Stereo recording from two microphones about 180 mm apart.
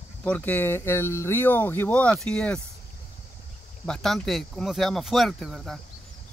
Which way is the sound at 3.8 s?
Centre (ahead or behind).